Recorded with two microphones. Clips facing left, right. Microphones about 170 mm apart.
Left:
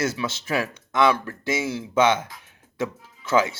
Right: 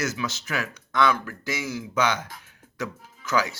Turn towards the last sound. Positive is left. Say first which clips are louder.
# left 4 dB
turn(degrees=25)  # may be behind; listen again after turning